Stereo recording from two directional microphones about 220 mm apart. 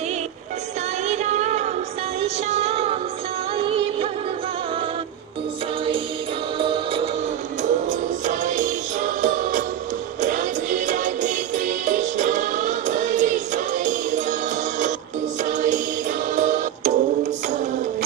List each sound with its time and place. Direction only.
1.0 s music: 30° right (ahead or behind)
6.6 s music: 25° right (ahead or behind)
7.6 s music: 35° right (ahead or behind)
15.4 s music: 35° right (ahead or behind)